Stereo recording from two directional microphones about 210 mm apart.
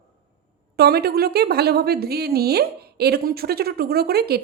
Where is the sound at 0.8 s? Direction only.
45° right (ahead or behind).